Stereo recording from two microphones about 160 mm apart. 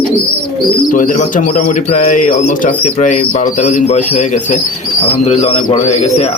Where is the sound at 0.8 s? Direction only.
60° left (ahead or behind).